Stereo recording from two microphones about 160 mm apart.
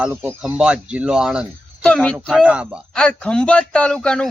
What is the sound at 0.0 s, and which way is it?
Speech, 15° right (ahead or behind).